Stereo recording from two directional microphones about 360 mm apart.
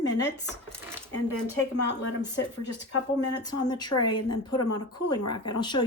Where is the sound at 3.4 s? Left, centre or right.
Centre.